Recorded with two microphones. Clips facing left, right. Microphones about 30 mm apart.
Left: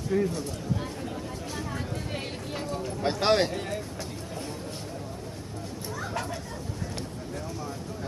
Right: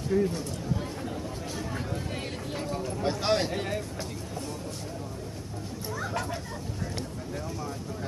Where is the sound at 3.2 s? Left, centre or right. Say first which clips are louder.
Left 4 dB; left.